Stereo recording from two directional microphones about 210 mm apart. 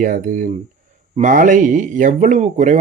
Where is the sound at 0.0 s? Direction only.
40° right (ahead or behind).